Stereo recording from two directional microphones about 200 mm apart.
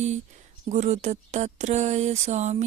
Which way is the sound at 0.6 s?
35° right (ahead or behind).